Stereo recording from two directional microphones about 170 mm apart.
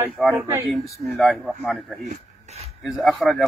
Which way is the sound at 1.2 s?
Centre (ahead or behind).